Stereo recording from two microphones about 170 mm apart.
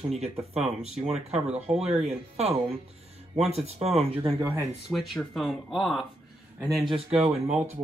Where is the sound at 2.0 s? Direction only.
40° right (ahead or behind).